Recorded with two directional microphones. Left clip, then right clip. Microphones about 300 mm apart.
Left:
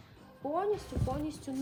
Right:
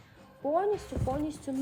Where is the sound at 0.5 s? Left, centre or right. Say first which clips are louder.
Right 3 dB; centre.